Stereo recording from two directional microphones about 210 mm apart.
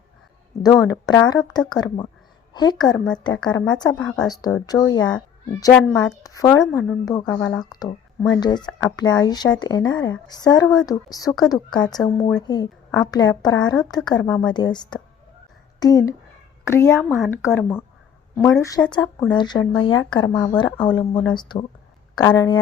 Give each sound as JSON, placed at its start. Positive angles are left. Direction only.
{"t": 0.9, "sound": "speech", "side_deg": 15}
{"t": 3.9, "sound": "speech", "side_deg": 5}
{"t": 4.3, "sound": "a woman's voice", "side_deg": 20}
{"t": 14.3, "sound": "a woman's voice", "side_deg": 5}
{"t": 14.5, "sound": "a woman's voice", "side_deg": 20}
{"t": 18.9, "sound": "a woman's voice", "side_deg": 20}